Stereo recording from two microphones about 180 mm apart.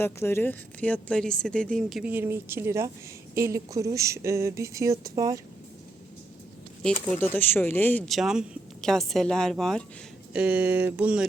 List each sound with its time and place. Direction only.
0.0 s speech: 15° left (ahead or behind); by 5.4 s 20° right (ahead or behind)
6.8 s speech: 5° left (ahead or behind)